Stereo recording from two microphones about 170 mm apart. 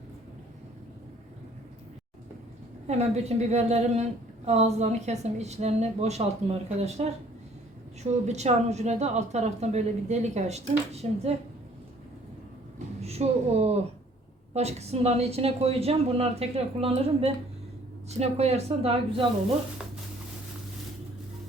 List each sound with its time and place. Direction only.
2.8 s a woman's voice: 40° right (ahead or behind)
13.1 s a woman's voice: 40° right (ahead or behind)